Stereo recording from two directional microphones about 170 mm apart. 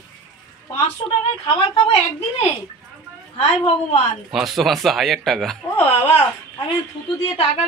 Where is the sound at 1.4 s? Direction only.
30° left (ahead or behind).